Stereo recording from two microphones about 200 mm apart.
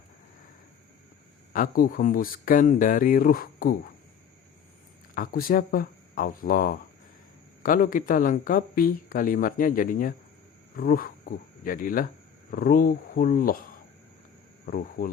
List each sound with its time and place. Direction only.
1.5 s speech: 45° left (ahead or behind)
5.1 s speech: 45° left (ahead or behind)
14.7 s speech: 45° left (ahead or behind)